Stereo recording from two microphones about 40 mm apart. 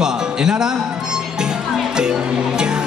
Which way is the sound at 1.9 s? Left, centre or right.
Centre.